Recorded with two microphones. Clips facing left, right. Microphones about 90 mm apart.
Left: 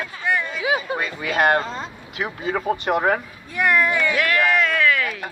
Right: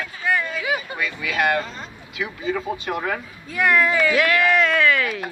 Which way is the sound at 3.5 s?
5° left (ahead or behind).